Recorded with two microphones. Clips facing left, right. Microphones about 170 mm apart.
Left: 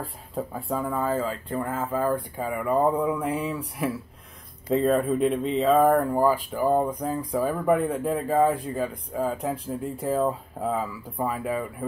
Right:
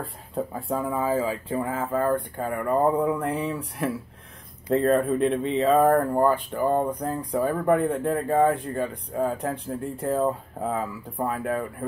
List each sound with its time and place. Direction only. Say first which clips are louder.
0.0 s speech: right 2 dB; centre (ahead or behind)